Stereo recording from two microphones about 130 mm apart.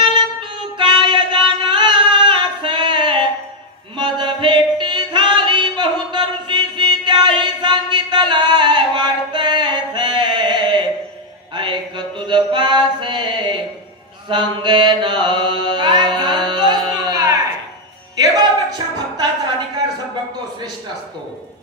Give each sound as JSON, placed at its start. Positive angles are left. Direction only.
{"t": 0.0, "sound": "singing", "side_deg": -40}
{"t": 3.9, "sound": "music", "side_deg": -35}
{"t": 12.3, "sound": "mantra", "side_deg": -35}
{"t": 14.3, "sound": "music", "side_deg": -35}